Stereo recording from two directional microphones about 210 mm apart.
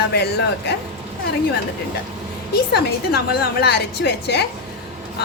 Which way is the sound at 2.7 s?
50° left (ahead or behind).